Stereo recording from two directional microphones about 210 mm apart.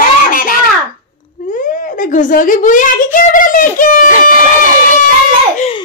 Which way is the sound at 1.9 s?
40° left (ahead or behind).